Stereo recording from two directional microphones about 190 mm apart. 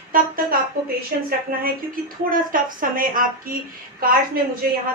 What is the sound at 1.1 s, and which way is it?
A woman's voice, 55° right (ahead or behind).